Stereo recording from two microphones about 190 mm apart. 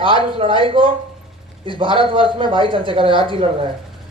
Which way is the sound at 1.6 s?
25° right (ahead or behind).